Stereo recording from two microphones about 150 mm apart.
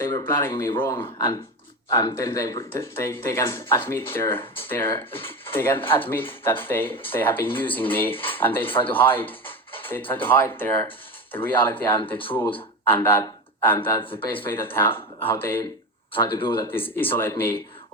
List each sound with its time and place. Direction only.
0.0 s speech: 15° left (ahead or behind)
14.0 s speech: 35° left (ahead or behind)
14.3 s speech: 15° left (ahead or behind)
16.1 s speech: 25° left (ahead or behind)
17.0 s speech: 15° left (ahead or behind)